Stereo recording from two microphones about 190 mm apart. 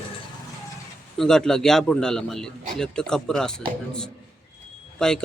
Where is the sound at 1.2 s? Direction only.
5° left (ahead or behind).